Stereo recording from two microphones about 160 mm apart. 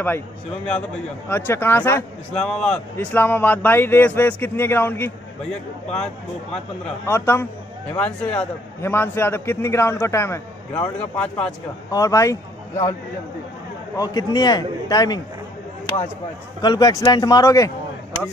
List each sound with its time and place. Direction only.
1.3 s speech: 15° left (ahead or behind)
2.4 s speech: 5° left (ahead or behind)
7.1 s speech: 15° left (ahead or behind)
11.9 s speech: 20° left (ahead or behind)
13.9 s a man's voice: 25° left (ahead or behind)
16.6 s a man's voice: 25° left (ahead or behind)